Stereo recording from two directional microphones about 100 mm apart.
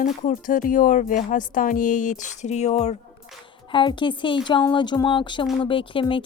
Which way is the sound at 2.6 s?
90° left.